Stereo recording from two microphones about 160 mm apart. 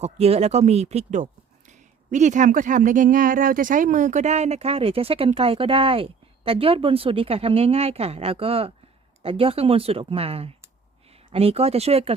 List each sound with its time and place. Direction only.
0.0 s speech: 40° right (ahead or behind)